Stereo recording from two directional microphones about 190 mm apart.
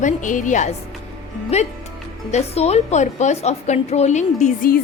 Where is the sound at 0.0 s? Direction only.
40° left (ahead or behind).